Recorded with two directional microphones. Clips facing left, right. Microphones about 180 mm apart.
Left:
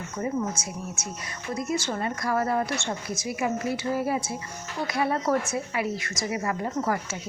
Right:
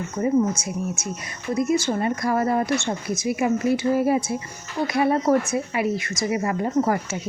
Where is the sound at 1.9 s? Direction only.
15° right (ahead or behind).